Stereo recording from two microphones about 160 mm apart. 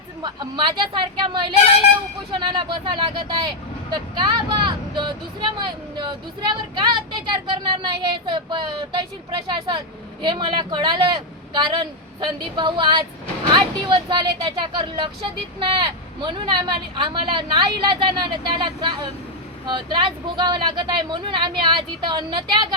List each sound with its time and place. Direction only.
0.2 s speech: 30° right (ahead or behind)